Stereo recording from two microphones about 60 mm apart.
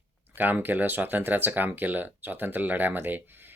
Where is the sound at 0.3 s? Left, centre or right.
Right.